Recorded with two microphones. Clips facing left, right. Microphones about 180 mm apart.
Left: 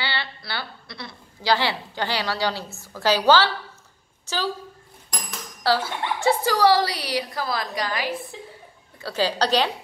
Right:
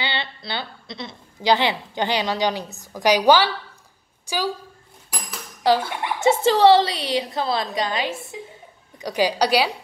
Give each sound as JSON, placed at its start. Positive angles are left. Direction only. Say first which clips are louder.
{"t": 0.0, "sound": "a woman's voice", "louder": "right 2 dB", "side_deg": -20}
{"t": 5.1, "sound": "dishes", "louder": "even", "side_deg": -5}
{"t": 5.6, "sound": "a woman's voice", "louder": "right 3 dB", "side_deg": -15}